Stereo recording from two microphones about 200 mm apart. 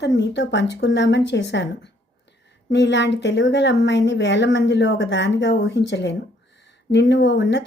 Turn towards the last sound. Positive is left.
turn(degrees=60)  # may be behind; listen again after turning